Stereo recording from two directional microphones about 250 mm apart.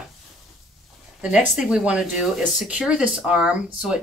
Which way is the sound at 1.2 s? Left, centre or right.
Centre.